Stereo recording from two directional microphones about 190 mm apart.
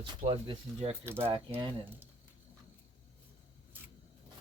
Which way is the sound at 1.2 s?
30° right (ahead or behind).